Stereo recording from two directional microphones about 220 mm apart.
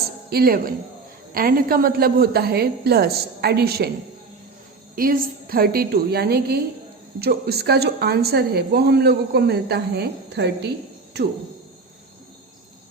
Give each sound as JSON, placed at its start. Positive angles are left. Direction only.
{"t": 0.3, "sound": "a woman's voice", "side_deg": -45}
{"t": 4.9, "sound": "a woman's voice", "side_deg": -40}